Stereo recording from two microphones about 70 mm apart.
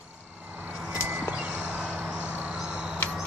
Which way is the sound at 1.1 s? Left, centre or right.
Right.